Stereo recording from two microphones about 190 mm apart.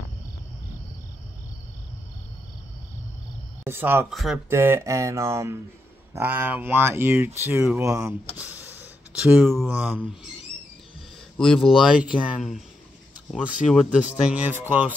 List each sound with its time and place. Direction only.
3.6 s speech: 10° right (ahead or behind)
4.1 s speech: centre (ahead or behind)
4.5 s speech: 15° right (ahead or behind)
8.4 s a sound: 10° right (ahead or behind)
9.5 s speech: centre (ahead or behind)
11.3 s speech: 5° left (ahead or behind)